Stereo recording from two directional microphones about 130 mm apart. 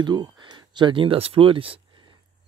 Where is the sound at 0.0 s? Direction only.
35° right (ahead or behind).